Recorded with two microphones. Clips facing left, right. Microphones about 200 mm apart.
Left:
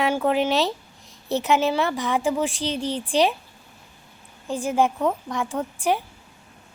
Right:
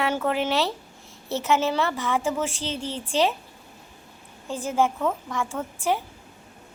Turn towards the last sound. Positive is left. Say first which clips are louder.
# left 2 dB
turn(degrees=15)  # may be behind; listen again after turning